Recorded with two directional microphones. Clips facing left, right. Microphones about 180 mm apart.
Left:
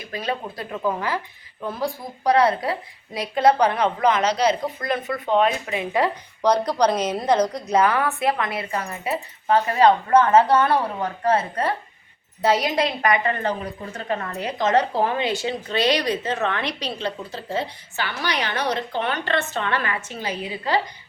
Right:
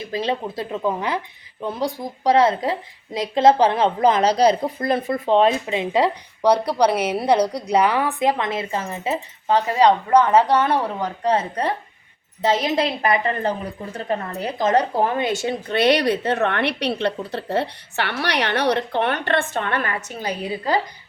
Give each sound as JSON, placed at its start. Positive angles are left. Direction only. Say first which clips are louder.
{"t": 0.0, "sound": "a woman's voice", "louder": "right 4 dB", "side_deg": -25}